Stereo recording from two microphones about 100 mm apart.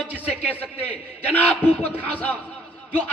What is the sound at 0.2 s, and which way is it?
A man's voice, 15° left (ahead or behind).